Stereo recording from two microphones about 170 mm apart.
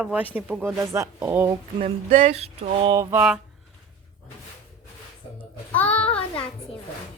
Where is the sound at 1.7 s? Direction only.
40° right (ahead or behind).